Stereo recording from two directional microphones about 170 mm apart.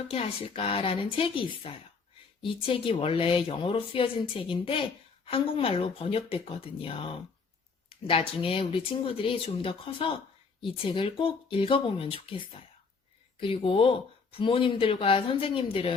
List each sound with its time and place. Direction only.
0.1 s speech: 35° left (ahead or behind)